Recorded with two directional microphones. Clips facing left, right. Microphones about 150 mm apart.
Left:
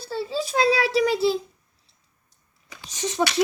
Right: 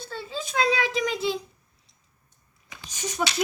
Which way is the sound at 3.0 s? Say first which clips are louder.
Left 5 dB; 25° left (ahead or behind).